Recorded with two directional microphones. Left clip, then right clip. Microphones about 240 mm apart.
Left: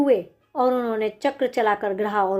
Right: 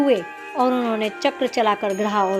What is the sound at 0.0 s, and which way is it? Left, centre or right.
Speech, right.